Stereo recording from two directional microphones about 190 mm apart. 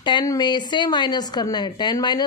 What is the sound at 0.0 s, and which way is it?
Speech, 20° left (ahead or behind).